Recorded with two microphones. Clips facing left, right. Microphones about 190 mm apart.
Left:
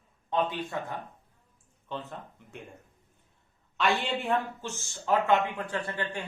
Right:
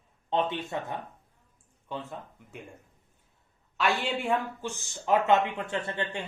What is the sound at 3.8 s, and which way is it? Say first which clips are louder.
Speech: even; 5° right (ahead or behind).